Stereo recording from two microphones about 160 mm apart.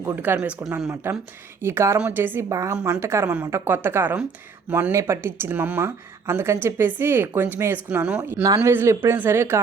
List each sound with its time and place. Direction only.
0.0 s speech: 10° right (ahead or behind)
1.6 s speech: 15° right (ahead or behind)
2.7 s speech: 5° right (ahead or behind)
3.0 s speech: 15° right (ahead or behind)